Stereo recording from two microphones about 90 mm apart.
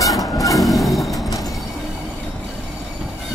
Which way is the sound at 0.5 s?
Centre (ahead or behind).